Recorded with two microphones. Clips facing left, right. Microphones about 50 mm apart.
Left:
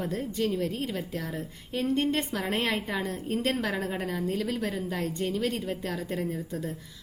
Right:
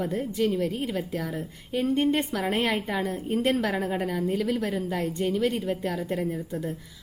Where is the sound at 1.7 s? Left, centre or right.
Centre.